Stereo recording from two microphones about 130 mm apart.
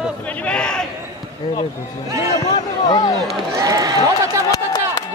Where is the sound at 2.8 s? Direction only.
30° left (ahead or behind).